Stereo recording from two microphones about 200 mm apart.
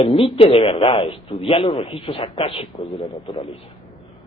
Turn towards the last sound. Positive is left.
turn(degrees=25)  # may be behind; listen again after turning